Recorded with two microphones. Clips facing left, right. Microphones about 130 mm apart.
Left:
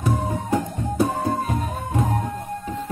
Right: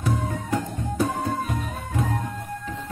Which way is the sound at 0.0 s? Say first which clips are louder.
Left 3 dB; 15° left (ahead or behind).